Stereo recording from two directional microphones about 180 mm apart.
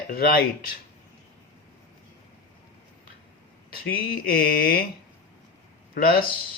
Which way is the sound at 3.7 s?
55° left (ahead or behind).